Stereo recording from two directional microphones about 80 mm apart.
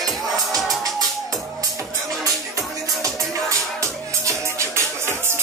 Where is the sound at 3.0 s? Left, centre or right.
Right.